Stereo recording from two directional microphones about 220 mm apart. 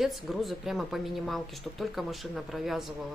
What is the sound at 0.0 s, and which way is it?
A woman's voice, centre (ahead or behind).